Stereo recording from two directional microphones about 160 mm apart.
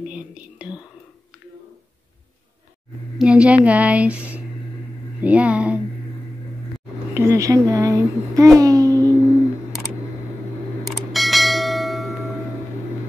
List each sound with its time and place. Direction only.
0.0 s whispering: 5° right (ahead or behind)
3.2 s speech: 5° right (ahead or behind)
7.2 s speech: 20° right (ahead or behind)
7.7 s child singing: 20° right (ahead or behind)
10.8 s bell: centre (ahead or behind)